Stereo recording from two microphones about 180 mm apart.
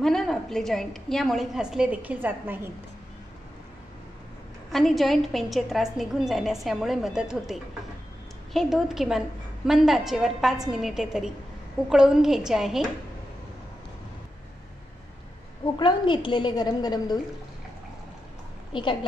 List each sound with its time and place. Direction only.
0.0 s a woman's voice: centre (ahead or behind)
4.6 s a woman's voice: centre (ahead or behind)
15.6 s a woman's voice: 25° left (ahead or behind)
18.7 s a woman's voice: 25° left (ahead or behind)